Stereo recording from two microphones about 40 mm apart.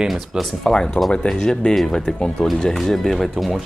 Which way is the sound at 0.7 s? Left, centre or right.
Centre.